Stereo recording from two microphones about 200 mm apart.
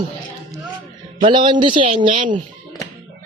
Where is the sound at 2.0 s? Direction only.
25° right (ahead or behind).